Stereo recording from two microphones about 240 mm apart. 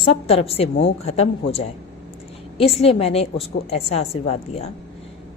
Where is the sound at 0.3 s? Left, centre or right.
Left.